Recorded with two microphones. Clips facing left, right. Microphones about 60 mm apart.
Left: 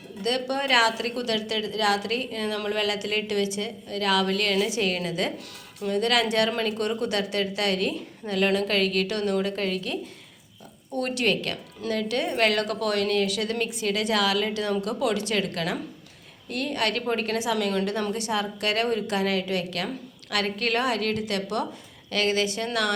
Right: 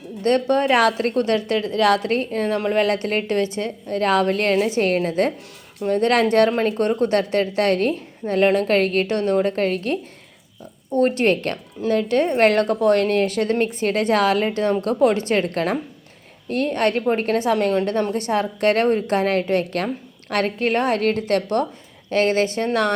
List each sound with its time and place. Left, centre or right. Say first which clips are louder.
0.2 s a woman's voice: right 8 dB; right